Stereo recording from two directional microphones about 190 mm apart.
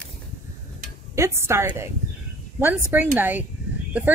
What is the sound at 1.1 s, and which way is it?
Speech, 15° right (ahead or behind).